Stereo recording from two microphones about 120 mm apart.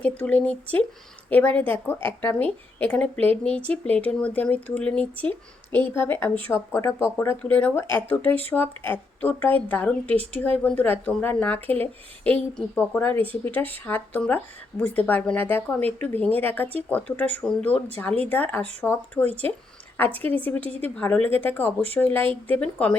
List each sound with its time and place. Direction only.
0.2 s speech: 10° left (ahead or behind)
19.3 s speech: 55° right (ahead or behind)
20.0 s speech: 15° left (ahead or behind)